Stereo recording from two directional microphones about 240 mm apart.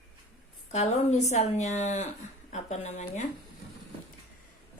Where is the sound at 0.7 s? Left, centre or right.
Left.